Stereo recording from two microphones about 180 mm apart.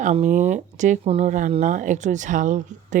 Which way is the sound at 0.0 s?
40° right (ahead or behind).